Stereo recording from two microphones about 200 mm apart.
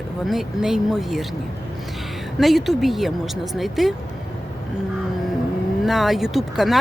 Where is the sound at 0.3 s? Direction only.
Centre (ahead or behind).